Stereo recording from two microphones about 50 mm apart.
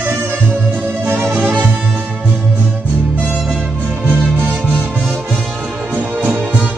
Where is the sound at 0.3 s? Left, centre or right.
Right.